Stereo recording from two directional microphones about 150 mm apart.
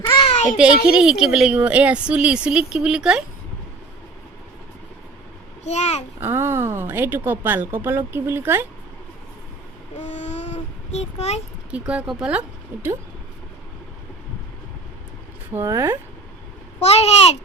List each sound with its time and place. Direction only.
0.1 s a sound: 40° left (ahead or behind)
0.9 s speech: 5° right (ahead or behind)
5.6 s a child's voice: 50° left (ahead or behind)
6.1 s speech: 15° right (ahead or behind)
10.1 s vehicle: 50° left (ahead or behind)
11.9 s speech: 5° right (ahead or behind)
15.5 s speech: 20° right (ahead or behind)
16.8 s a child's voice: 45° left (ahead or behind)